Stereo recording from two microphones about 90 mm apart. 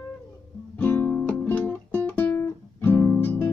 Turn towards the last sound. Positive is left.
turn(degrees=25)  # may be behind; listen again after turning